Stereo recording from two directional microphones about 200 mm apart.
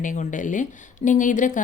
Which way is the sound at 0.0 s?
40° left (ahead or behind).